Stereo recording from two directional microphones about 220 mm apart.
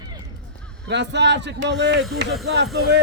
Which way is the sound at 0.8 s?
50° right (ahead or behind).